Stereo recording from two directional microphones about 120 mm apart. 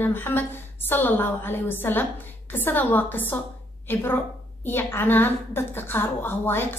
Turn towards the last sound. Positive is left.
turn(degrees=20)  # may be behind; listen again after turning